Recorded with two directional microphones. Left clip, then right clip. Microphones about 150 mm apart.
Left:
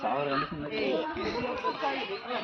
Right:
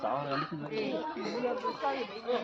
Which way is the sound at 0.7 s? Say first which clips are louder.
Left 5 dB; 20° right (ahead or behind).